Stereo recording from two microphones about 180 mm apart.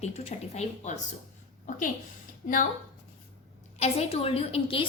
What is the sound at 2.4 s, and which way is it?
Speech, 45° left (ahead or behind).